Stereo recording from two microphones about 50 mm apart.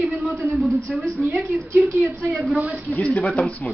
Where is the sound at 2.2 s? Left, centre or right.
Centre.